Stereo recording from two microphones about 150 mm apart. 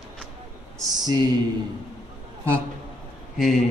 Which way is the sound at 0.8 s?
25° right (ahead or behind).